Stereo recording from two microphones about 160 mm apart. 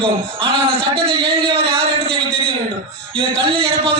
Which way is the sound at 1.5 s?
35° right (ahead or behind).